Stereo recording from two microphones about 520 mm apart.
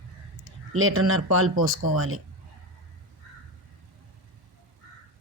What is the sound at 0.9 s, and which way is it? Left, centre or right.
Speech, right.